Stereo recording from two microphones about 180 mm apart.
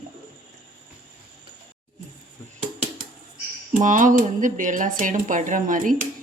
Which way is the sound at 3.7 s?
45° right (ahead or behind).